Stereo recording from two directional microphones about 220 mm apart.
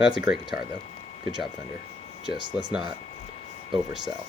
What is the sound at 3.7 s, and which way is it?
Speech, centre (ahead or behind).